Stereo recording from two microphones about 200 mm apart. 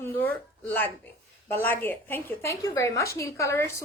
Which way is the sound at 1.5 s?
10° left (ahead or behind).